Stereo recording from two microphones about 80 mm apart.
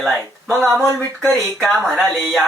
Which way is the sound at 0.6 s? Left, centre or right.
Right.